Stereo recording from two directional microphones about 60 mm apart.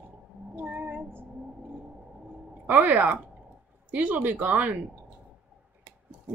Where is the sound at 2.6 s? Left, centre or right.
Right.